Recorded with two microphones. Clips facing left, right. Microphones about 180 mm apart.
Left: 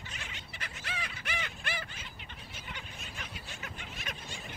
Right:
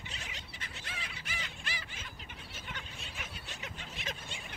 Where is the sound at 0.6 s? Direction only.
75° left (ahead or behind).